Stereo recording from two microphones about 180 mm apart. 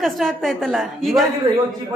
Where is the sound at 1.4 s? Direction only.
25° right (ahead or behind).